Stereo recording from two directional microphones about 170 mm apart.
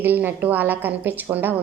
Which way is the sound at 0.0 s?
10° right (ahead or behind).